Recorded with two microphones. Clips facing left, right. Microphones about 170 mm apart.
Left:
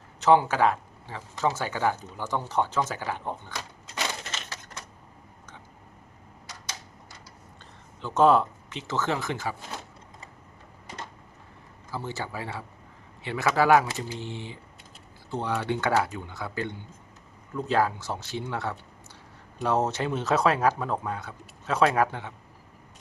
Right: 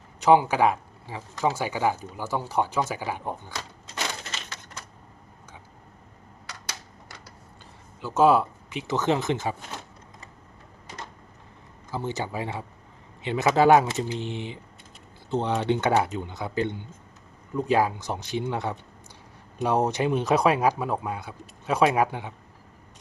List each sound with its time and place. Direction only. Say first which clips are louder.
0.2 s speech: right 2 dB; 15° right (ahead or behind)
6.5 s a sound: right 1 dB; 70° right (ahead or behind)
8.0 s speech: right 1 dB; 5° right (ahead or behind)
11.9 s speech: right 4 dB; 20° right (ahead or behind)